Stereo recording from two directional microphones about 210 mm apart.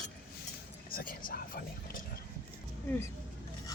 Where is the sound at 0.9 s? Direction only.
45° left (ahead or behind).